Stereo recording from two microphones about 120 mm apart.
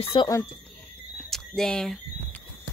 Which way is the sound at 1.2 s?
5° left (ahead or behind).